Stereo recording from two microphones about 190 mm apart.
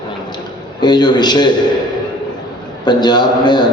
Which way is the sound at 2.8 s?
20° left (ahead or behind).